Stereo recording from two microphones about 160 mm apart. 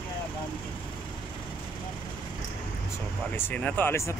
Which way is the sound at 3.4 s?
10° left (ahead or behind).